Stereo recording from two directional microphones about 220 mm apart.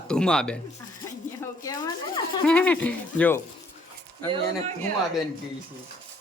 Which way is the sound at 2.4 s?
5° left (ahead or behind).